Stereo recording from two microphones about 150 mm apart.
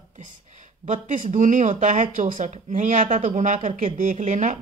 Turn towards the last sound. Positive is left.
turn(degrees=-55)  # may be behind; listen again after turning